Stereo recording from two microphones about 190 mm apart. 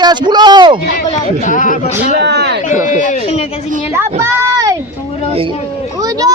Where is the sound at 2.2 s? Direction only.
60° right (ahead or behind).